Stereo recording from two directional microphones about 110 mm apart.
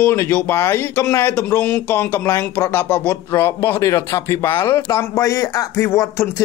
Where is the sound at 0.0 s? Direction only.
20° left (ahead or behind).